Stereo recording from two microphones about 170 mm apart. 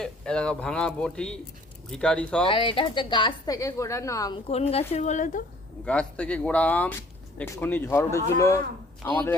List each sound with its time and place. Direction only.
0.0 s speech: 5° left (ahead or behind)
2.4 s a woman's voice: 30° left (ahead or behind)
4.4 s a woman's voice: 35° left (ahead or behind)
5.8 s speech: 5° left (ahead or behind)